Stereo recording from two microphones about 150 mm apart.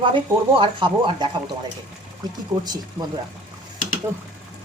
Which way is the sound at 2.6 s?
25° right (ahead or behind).